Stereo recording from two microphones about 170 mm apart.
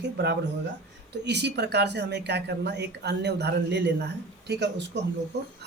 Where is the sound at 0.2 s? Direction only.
75° right (ahead or behind).